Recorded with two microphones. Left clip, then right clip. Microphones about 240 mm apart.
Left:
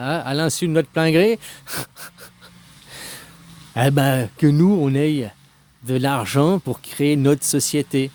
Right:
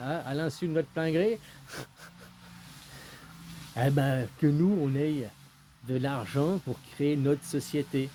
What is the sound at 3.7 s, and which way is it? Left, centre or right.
Speech, left.